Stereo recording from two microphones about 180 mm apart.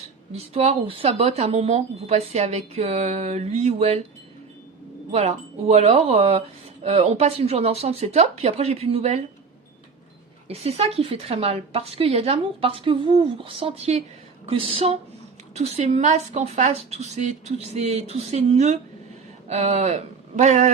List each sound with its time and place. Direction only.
0.0 s speech: 35° right (ahead or behind)
5.1 s speech: 35° right (ahead or behind)
10.5 s speech: 35° right (ahead or behind)